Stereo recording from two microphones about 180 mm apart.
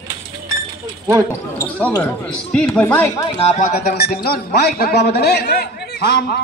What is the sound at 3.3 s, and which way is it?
Speech, 40° left (ahead or behind).